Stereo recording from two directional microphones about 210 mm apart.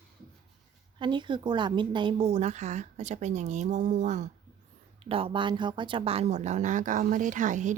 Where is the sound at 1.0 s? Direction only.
20° right (ahead or behind).